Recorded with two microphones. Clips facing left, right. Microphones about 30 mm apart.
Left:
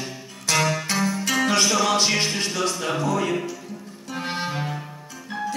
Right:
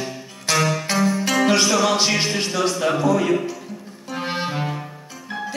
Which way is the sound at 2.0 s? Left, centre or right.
Centre.